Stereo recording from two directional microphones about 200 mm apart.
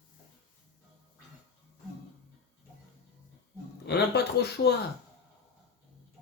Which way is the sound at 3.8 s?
55° left (ahead or behind).